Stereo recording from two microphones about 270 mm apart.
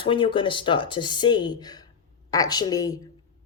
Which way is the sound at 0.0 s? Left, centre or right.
Centre.